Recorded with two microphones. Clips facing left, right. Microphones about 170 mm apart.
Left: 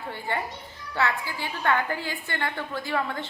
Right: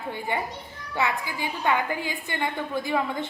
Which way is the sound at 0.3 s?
15° right (ahead or behind).